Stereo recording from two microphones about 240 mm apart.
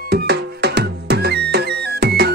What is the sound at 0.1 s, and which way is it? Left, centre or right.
Music, right.